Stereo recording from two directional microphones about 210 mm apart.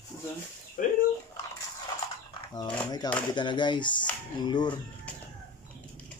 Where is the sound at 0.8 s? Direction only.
40° left (ahead or behind).